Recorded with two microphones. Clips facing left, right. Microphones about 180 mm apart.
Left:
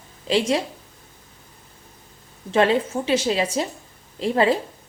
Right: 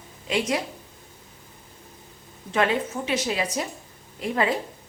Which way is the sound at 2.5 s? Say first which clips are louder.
Left 5 dB; 30° left (ahead or behind).